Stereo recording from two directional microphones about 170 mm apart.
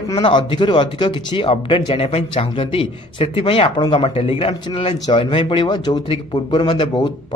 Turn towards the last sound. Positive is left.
turn(degrees=30)  # may be behind; listen again after turning